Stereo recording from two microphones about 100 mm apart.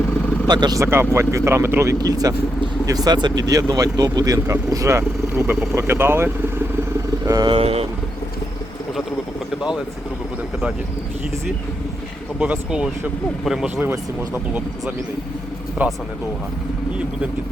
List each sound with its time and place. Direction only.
0.4 s speech: 45° right (ahead or behind)
0.8 s speech: 25° right (ahead or behind)
2.0 s speech: 40° right (ahead or behind); by 6.3 s 25° right (ahead or behind)
7.3 s speech: 40° right (ahead or behind)
7.5 s speech: 80° right
12.4 s speech: 10° right (ahead or behind)
13.8 s speech: 20° right (ahead or behind)